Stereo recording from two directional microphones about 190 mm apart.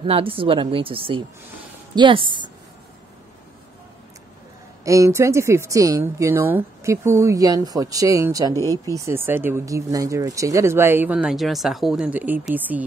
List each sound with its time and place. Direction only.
0.0 s speech: 30° right (ahead or behind)
4.8 s speech: 15° right (ahead or behind)